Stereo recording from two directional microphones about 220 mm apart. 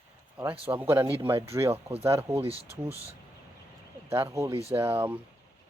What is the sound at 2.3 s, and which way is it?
Speech, 25° right (ahead or behind).